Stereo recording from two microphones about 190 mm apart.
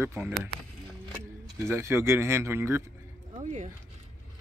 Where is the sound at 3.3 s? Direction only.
40° right (ahead or behind).